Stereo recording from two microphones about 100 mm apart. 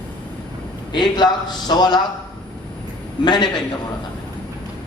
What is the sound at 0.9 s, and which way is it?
A man's voice, 45° left (ahead or behind).